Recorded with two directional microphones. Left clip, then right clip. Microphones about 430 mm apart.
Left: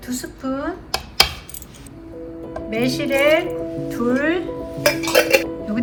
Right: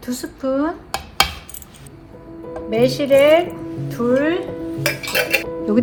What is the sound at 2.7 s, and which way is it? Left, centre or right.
Speech, centre.